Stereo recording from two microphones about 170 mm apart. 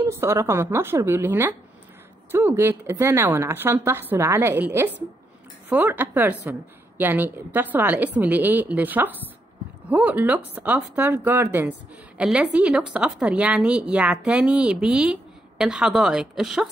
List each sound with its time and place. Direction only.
0.0 s a woman's voice: 15° right (ahead or behind)